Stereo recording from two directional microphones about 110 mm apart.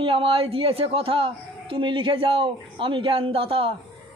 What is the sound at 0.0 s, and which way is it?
A woman's voice, 55° right (ahead or behind).